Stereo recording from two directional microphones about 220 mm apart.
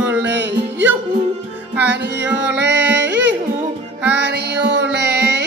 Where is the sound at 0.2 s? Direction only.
55° right (ahead or behind).